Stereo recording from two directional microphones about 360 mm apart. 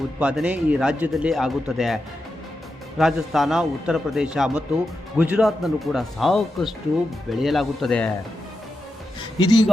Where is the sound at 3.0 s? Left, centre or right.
Centre.